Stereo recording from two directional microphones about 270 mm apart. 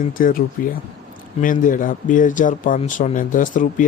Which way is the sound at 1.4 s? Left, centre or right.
Left.